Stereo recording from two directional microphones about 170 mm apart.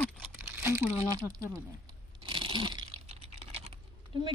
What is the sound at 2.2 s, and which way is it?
Crunch, 30° right (ahead or behind).